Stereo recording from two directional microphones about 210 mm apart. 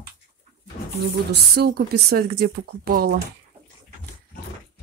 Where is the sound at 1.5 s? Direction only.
50° right (ahead or behind).